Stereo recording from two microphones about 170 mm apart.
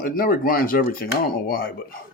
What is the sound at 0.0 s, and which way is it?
Speech, 55° left (ahead or behind).